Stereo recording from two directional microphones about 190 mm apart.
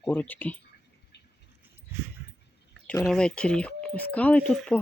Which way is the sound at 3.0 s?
5° left (ahead or behind).